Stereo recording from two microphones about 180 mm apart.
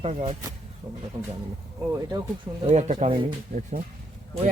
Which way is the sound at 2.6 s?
40° right (ahead or behind).